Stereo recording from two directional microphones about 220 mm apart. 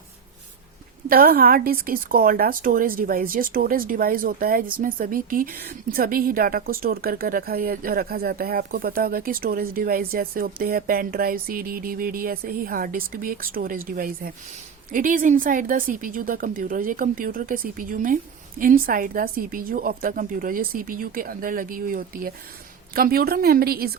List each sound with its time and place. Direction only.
1.0 s a woman's voice: 45° right (ahead or behind)